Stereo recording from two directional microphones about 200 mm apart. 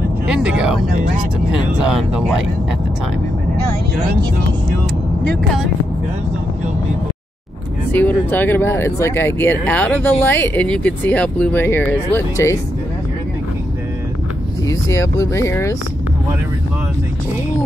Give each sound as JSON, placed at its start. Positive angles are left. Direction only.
{"t": 0.3, "sound": "speech", "side_deg": -5}
{"t": 7.9, "sound": "speech", "side_deg": 10}
{"t": 14.7, "sound": "speech", "side_deg": 15}